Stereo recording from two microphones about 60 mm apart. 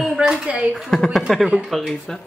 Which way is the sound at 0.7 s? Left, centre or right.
Centre.